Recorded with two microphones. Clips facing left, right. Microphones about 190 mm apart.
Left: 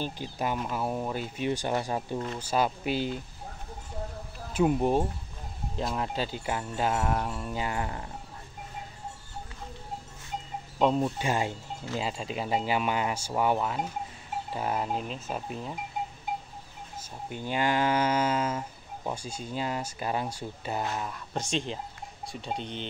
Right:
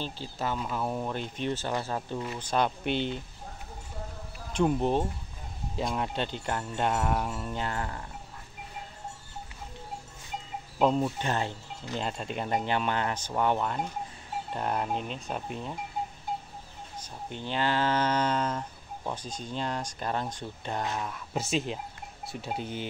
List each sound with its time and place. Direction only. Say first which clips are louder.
0.0 s livestock: left 2 dB; 15° left (ahead or behind)
2.3 s speech: even; 5° left (ahead or behind)
4.5 s speech: left 1 dB; 5° left (ahead or behind)
10.8 s speech: even; centre (ahead or behind)
11.1 s livestock: left 2 dB; 10° left (ahead or behind)
14.5 s speech: even; 5° left (ahead or behind)
17.0 s livestock: left 2 dB; 10° left (ahead or behind)
22.2 s speech: even; 5° right (ahead or behind)